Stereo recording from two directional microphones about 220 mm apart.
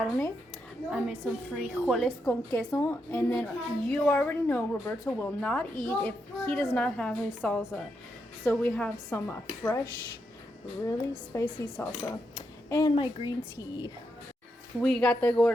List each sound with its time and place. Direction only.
0.9 s a woman's voice: centre (ahead or behind)
2.5 s a woman's voice: 15° left (ahead or behind)
14.8 s a woman's voice: 5° left (ahead or behind)